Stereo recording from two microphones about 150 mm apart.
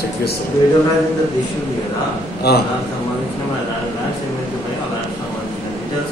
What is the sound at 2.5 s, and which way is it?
Speech, 90° left.